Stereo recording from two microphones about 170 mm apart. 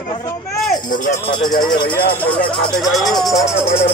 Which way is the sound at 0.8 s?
50° left (ahead or behind).